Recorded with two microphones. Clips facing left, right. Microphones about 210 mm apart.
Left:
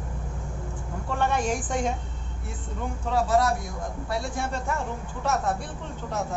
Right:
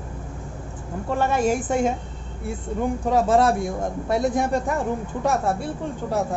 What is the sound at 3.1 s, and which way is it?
Speech, 25° right (ahead or behind).